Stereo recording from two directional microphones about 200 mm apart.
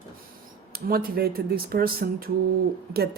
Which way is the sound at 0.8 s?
45° right (ahead or behind).